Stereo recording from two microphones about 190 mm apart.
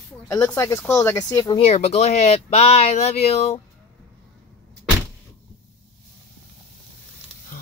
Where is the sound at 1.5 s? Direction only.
35° left (ahead or behind).